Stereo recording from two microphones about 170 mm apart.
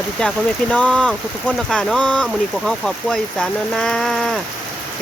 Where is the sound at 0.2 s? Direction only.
5° left (ahead or behind).